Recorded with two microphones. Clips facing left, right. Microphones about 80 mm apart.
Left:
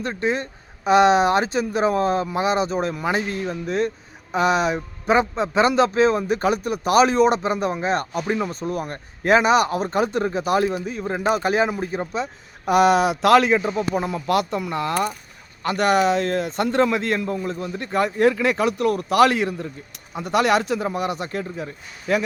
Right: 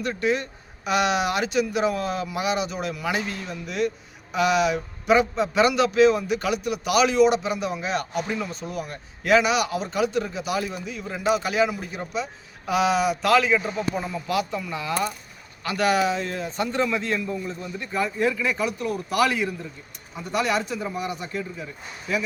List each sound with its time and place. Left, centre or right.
0.0 s speech: left
12.6 s a man's voice: left